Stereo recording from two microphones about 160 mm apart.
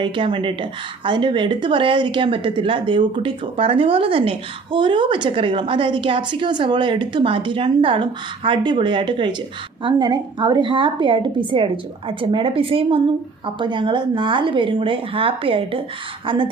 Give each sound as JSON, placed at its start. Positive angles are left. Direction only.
{"t": 0.0, "sound": "speech", "side_deg": -30}